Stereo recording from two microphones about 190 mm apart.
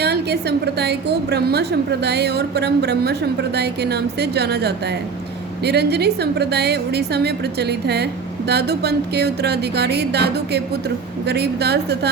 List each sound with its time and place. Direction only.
0.0 s a woman's voice: 60° right (ahead or behind)